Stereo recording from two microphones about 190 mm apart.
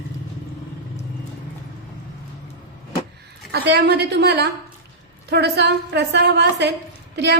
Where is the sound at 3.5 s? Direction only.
65° right (ahead or behind).